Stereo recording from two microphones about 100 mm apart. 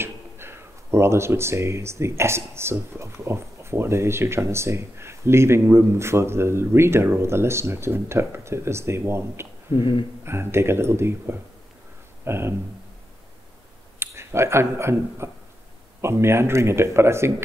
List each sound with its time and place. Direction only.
0.0 s speech: 25° right (ahead or behind)
9.8 s speech: 55° left (ahead or behind)
10.2 s speech: 25° right (ahead or behind)
13.9 s speech: 25° right (ahead or behind)